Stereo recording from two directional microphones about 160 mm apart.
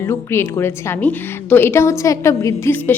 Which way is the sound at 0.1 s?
15° left (ahead or behind).